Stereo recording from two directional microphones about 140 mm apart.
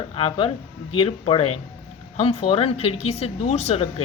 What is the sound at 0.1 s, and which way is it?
Speech, 35° left (ahead or behind).